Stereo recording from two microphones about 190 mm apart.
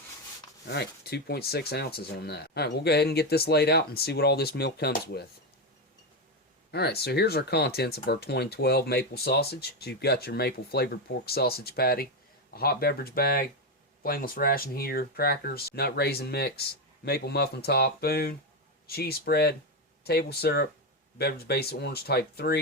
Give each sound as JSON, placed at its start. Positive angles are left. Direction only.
{"t": 0.7, "sound": "speech", "side_deg": 60}
{"t": 6.7, "sound": "speech", "side_deg": 60}